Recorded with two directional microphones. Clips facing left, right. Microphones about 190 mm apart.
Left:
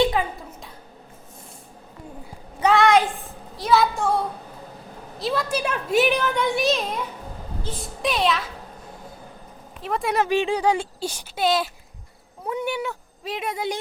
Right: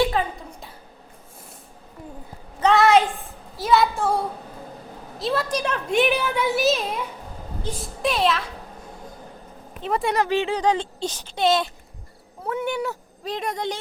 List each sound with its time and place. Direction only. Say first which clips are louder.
0.0 s a sound: left 1 dB; 15° left (ahead or behind)
2.7 s a sound: right 1 dB; 5° right (ahead or behind)
3.6 s a woman's voice: even; centre (ahead or behind)
5.2 s a woman's voice: even; centre (ahead or behind)
6.1 s a woman's voice: even; 5° right (ahead or behind)
8.0 s a woman's voice: right 1 dB; centre (ahead or behind)
9.8 s a woman's voice: right 2 dB; centre (ahead or behind)
10.2 s speech: left 1 dB; 15° left (ahead or behind)
12.5 s speech: right 1 dB; 15° left (ahead or behind)
12.8 s speech: right 2 dB; centre (ahead or behind)